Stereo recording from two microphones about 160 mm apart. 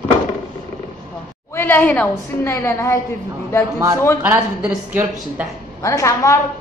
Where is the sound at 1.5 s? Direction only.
15° left (ahead or behind).